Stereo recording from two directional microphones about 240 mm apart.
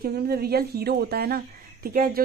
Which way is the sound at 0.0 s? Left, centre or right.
Right.